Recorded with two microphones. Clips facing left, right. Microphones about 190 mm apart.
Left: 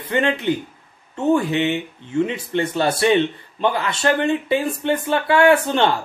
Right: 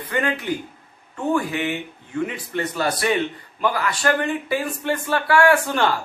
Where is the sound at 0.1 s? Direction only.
25° left (ahead or behind).